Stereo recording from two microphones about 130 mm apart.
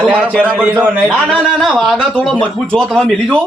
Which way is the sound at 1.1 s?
10° left (ahead or behind).